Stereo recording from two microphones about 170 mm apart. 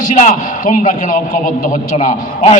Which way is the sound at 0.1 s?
50° left (ahead or behind).